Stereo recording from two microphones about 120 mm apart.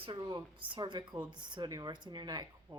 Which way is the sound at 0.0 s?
40° right (ahead or behind).